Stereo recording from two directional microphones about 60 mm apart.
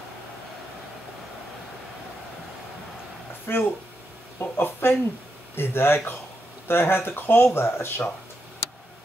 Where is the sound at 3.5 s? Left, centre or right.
Left.